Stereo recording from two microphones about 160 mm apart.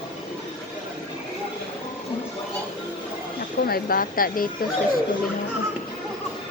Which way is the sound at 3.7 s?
65° left (ahead or behind).